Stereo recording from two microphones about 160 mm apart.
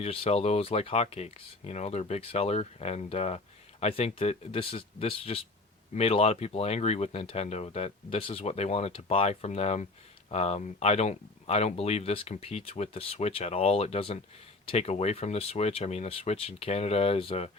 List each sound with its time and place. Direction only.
0.0 s speech: 40° left (ahead or behind)